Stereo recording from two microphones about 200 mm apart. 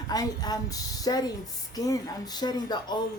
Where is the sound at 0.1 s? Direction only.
20° left (ahead or behind).